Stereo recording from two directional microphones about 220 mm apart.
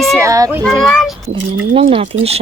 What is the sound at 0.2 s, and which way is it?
Speech, 15° right (ahead or behind).